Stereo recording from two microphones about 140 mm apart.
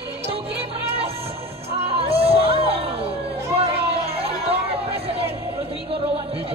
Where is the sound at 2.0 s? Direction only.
45° right (ahead or behind).